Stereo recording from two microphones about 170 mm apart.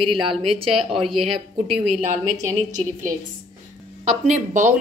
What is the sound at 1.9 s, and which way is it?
A woman's voice, 45° right (ahead or behind).